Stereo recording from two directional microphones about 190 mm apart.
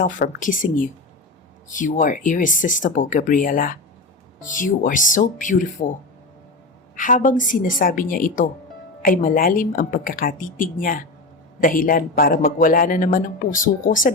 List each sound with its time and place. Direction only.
0.0 s speech: 45° left (ahead or behind)
6.9 s speech: 45° left (ahead or behind)